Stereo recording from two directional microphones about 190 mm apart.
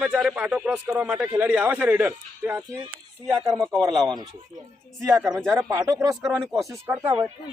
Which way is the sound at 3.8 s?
20° right (ahead or behind).